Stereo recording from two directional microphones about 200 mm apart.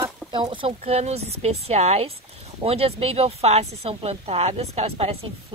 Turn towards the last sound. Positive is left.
turn(degrees=-30)  # may be behind; listen again after turning